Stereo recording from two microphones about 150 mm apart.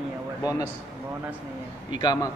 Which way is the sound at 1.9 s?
30° left (ahead or behind).